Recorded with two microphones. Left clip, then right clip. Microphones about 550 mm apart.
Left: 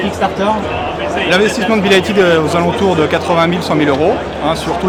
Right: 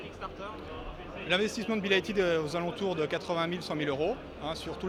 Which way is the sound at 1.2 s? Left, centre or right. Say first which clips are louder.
Left 17 dB; right.